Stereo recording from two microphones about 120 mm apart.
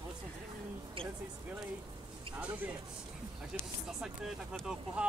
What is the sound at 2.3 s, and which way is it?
A man's voice, 10° right (ahead or behind).